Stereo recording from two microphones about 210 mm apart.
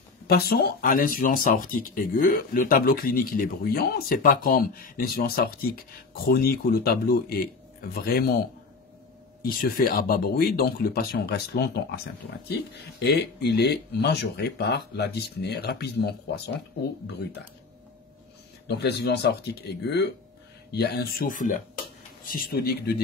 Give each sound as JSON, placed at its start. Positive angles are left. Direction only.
{"t": 0.3, "sound": "speech", "side_deg": 50}
{"t": 9.4, "sound": "speech", "side_deg": 45}
{"t": 13.0, "sound": "speech", "side_deg": 55}
{"t": 18.7, "sound": "speech", "side_deg": 50}